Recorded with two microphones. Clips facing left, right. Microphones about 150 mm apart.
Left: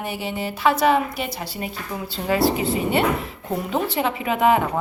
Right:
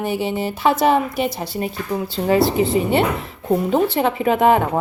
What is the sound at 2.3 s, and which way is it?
Speech, 25° right (ahead or behind).